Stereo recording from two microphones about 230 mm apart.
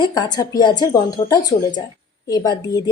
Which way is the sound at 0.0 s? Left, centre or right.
Centre.